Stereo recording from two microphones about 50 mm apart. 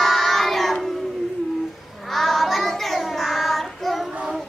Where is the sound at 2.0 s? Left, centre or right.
Centre.